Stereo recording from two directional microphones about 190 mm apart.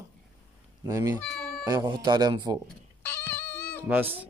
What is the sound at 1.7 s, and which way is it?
Speech, 20° right (ahead or behind).